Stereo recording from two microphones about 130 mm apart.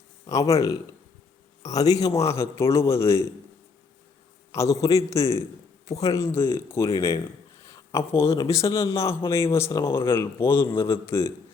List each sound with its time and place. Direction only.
0.3 s speech: 25° left (ahead or behind)
4.5 s speech: 20° left (ahead or behind)
9.9 s speech: 40° left (ahead or behind)
10.2 s speech: 20° left (ahead or behind)